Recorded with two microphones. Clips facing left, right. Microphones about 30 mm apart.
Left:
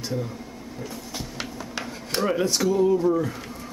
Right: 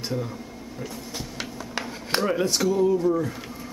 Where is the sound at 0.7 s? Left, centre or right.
Centre.